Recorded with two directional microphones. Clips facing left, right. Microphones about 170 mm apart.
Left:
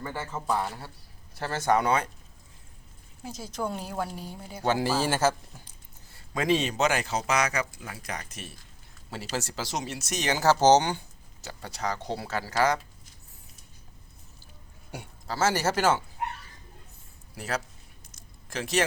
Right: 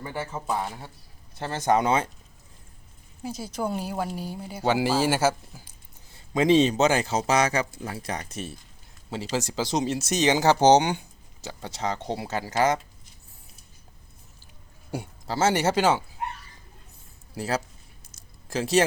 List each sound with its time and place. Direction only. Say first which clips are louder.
0.0 s speech: right 2 dB; 15° right (ahead or behind)
3.2 s speech: right 3 dB; centre (ahead or behind)
4.6 s speech: right 3 dB; 15° right (ahead or behind)
6.3 s speech: right 7 dB; 25° right (ahead or behind)
9.0 s speech: right 5 dB; 15° right (ahead or behind)
14.9 s speech: right 4 dB; 25° right (ahead or behind)
17.3 s speech: right 4 dB; 30° right (ahead or behind)